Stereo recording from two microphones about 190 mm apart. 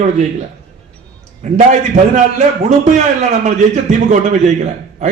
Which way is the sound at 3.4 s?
40° right (ahead or behind).